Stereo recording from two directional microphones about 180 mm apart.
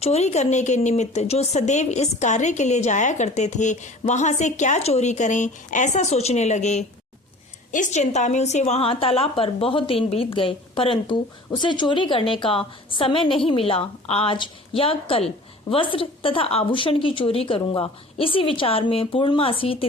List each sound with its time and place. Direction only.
0.0 s a woman's voice: 35° left (ahead or behind)